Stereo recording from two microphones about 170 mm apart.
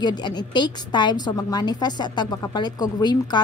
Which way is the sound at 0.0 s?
25° left (ahead or behind).